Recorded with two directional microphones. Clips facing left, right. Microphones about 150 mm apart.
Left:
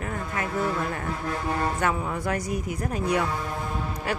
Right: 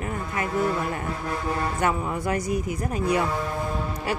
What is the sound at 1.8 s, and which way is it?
A woman's voice, 10° right (ahead or behind).